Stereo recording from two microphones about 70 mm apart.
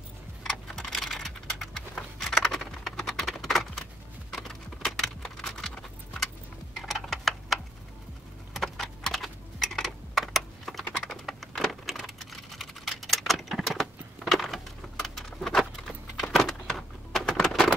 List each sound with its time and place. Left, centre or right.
0.4 s typing: centre
4.3 s keys jangling: centre
6.8 s a sound: centre
8.5 s typing: centre